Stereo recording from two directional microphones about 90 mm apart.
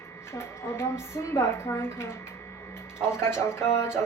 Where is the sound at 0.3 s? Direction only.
30° left (ahead or behind).